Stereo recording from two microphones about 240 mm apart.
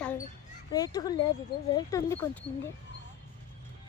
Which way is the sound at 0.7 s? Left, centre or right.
Centre.